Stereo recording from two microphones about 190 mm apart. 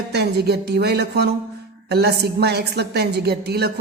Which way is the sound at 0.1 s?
60° right (ahead or behind).